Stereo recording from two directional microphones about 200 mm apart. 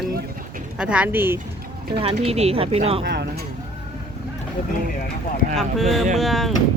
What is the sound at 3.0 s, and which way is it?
Speech, 55° right (ahead or behind).